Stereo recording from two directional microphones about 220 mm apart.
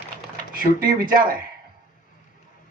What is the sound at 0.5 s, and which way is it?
Speech, 40° right (ahead or behind).